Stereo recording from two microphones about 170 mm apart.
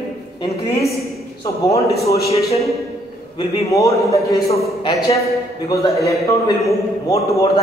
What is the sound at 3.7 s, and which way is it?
A man's voice, 20° left (ahead or behind).